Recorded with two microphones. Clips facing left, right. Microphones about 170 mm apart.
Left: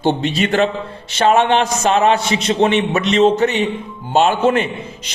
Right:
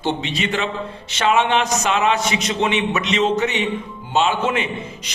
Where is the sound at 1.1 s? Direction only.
35° left (ahead or behind).